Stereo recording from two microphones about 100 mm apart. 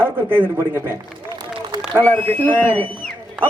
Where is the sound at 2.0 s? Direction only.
15° left (ahead or behind).